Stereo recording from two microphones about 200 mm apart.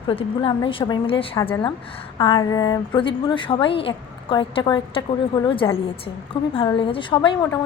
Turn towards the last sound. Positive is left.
turn(degrees=25)  # may be behind; listen again after turning